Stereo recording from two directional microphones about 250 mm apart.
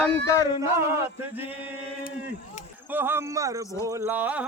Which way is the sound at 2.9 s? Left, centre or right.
Centre.